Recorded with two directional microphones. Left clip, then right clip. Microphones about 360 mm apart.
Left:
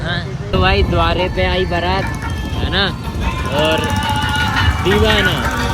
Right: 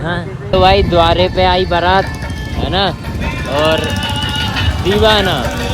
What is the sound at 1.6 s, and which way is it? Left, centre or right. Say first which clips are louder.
Speech: right 4 dB; right.